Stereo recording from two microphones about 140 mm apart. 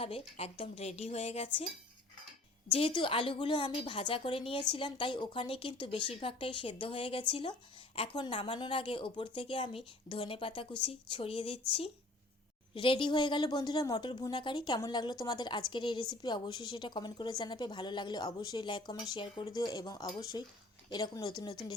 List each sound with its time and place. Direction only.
0.0 s a woman's voice: 45° left (ahead or behind)
2.6 s a woman's voice: 40° left (ahead or behind)